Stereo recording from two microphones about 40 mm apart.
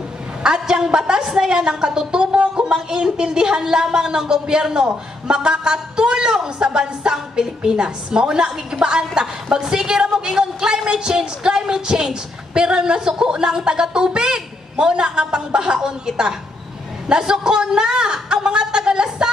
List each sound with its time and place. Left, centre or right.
0.4 s a woman's voice: centre